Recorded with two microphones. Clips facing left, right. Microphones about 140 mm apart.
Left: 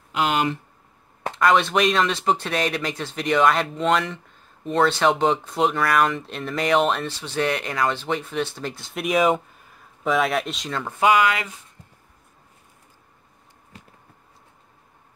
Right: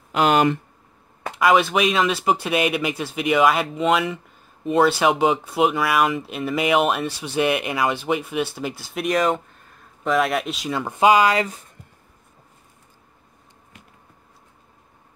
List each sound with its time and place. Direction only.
0.1 s speech: 50° right (ahead or behind)
1.3 s speech: 5° right (ahead or behind)
10.8 s speech: 20° right (ahead or behind); by 11.6 s 35° right (ahead or behind)
13.7 s bee: 35° left (ahead or behind)